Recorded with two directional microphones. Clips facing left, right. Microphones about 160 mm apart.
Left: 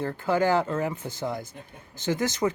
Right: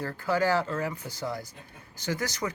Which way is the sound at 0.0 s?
20° left (ahead or behind).